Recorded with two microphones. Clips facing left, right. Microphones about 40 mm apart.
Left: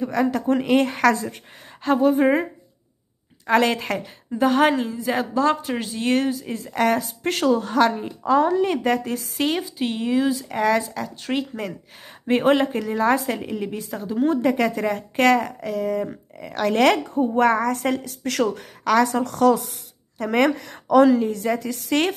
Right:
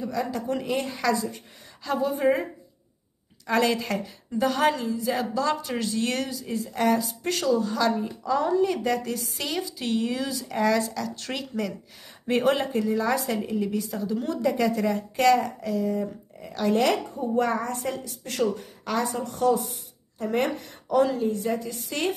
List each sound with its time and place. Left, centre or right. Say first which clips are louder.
0.0 s a woman's voice: left 7 dB; left
3.4 s a woman's voice: left 4 dB; left
10.5 s a woman's voice: left 1 dB; left
11.1 s a woman's voice: left 4 dB; left